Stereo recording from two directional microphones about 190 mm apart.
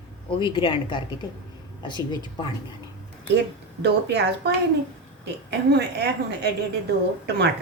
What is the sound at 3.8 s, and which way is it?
A woman's voice, 60° right (ahead or behind).